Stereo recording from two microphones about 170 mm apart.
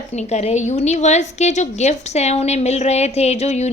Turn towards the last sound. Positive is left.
turn(degrees=40)  # may be behind; listen again after turning